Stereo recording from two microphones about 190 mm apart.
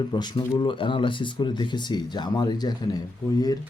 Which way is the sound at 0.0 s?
25° left (ahead or behind).